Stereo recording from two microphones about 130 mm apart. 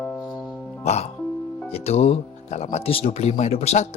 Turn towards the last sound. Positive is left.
turn(degrees=55)  # may be behind; listen again after turning